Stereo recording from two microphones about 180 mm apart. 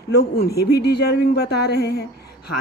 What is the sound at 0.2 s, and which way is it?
A woman's voice, 65° left (ahead or behind).